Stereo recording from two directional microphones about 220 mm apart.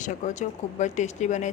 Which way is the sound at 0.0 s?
35° left (ahead or behind).